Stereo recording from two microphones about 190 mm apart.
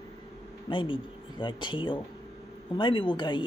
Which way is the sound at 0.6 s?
25° left (ahead or behind).